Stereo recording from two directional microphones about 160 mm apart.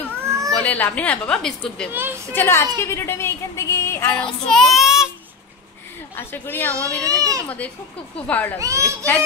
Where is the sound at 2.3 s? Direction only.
15° left (ahead or behind); by 5.1 s 5° right (ahead or behind).